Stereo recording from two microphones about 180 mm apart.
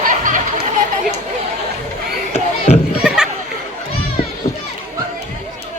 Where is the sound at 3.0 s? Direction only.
5° right (ahead or behind).